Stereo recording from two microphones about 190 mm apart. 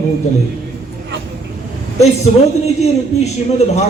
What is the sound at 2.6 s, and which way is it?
A man's voice, 35° left (ahead or behind).